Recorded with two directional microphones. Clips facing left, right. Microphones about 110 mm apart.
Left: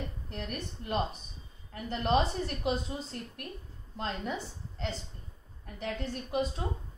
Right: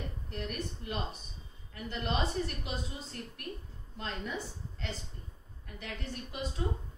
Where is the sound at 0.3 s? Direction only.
45° left (ahead or behind).